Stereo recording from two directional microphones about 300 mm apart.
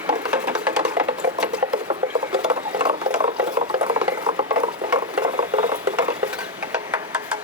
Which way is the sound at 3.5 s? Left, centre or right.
Right.